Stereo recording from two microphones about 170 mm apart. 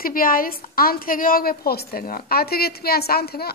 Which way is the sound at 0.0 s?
55° left (ahead or behind).